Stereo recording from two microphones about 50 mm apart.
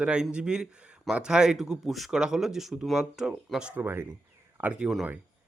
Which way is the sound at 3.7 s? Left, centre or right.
Right.